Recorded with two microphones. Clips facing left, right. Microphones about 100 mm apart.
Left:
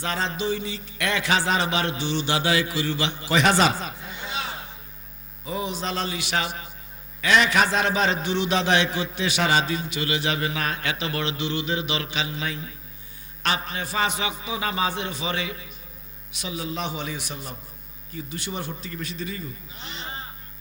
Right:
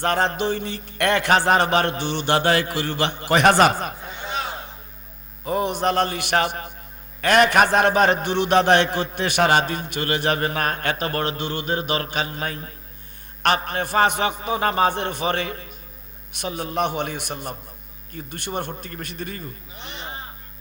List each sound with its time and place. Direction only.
0.0 s a man's voice: 55° right (ahead or behind)